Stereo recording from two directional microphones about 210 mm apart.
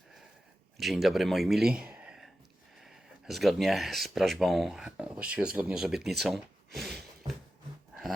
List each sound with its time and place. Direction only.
0.8 s speech: centre (ahead or behind)